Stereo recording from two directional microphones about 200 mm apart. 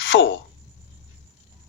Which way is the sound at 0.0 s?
65° left (ahead or behind).